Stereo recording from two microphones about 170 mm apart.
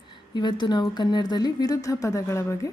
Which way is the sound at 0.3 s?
25° left (ahead or behind).